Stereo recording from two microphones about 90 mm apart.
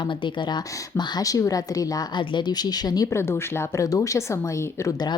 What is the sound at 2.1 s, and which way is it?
Speech, 60° left (ahead or behind).